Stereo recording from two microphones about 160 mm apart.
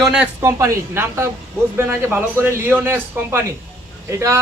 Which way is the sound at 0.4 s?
15° right (ahead or behind).